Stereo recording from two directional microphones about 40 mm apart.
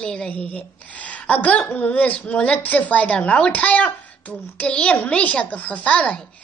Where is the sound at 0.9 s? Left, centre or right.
Left.